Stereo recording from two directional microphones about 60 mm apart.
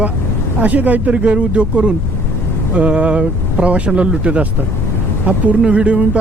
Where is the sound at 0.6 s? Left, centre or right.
Right.